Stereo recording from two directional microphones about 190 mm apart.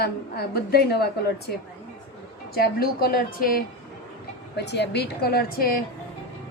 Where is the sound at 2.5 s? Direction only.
55° left (ahead or behind).